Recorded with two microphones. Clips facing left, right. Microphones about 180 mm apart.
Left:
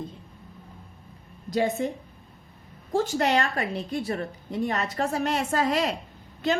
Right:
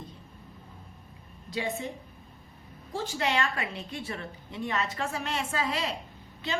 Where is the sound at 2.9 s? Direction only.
45° left (ahead or behind).